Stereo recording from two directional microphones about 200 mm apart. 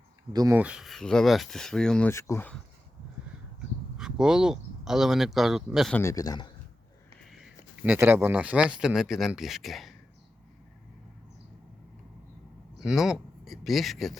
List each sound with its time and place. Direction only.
0.3 s speech: 15° right (ahead or behind); by 2.6 s 10° left (ahead or behind)
3.9 s speech: 5° right (ahead or behind)
6.0 s a man's voice: 15° left (ahead or behind)
7.2 s speech: centre (ahead or behind)
12.8 s speech: centre (ahead or behind)